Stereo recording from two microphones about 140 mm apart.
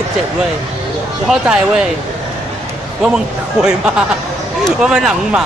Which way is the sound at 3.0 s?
5° right (ahead or behind).